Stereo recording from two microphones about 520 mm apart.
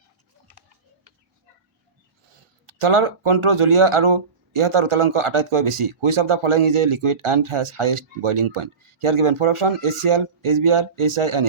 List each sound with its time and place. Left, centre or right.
2.6 s speech: right